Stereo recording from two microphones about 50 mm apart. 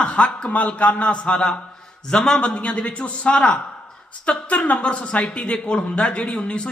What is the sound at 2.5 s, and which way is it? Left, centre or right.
Speech, left.